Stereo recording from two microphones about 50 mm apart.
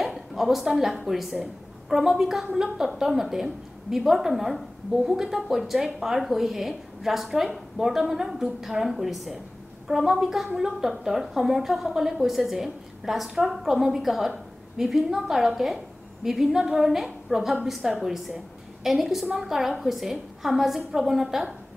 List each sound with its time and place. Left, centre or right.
0.0 s a woman's voice: centre